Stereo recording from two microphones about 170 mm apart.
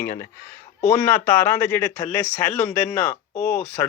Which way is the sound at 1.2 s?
15° left (ahead or behind).